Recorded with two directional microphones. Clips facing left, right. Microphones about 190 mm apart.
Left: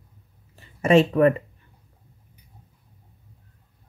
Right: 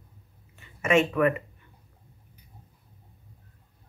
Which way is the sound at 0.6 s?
35° left (ahead or behind).